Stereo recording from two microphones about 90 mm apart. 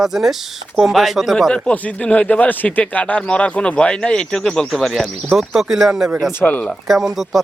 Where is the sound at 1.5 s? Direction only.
15° left (ahead or behind); by 6.1 s 5° right (ahead or behind).